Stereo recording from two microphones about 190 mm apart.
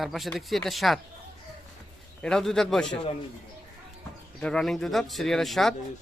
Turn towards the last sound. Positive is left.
turn(degrees=0)  # may be behind; listen again after turning